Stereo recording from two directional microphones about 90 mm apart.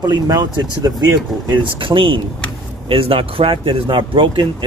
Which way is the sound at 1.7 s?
70° right (ahead or behind).